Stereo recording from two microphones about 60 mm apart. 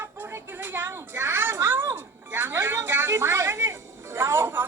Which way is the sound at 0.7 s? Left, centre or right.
Right.